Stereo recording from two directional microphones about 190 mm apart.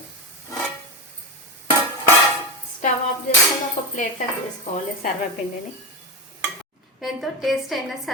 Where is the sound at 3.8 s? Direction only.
35° left (ahead or behind).